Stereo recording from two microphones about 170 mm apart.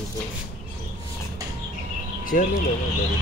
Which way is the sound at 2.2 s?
55° left (ahead or behind).